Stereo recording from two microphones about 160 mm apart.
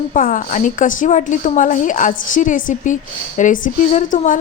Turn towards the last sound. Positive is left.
turn(degrees=55)  # may be behind; listen again after turning